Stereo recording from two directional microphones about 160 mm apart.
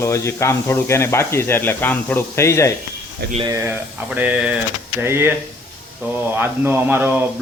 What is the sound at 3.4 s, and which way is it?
Speech, 15° right (ahead or behind).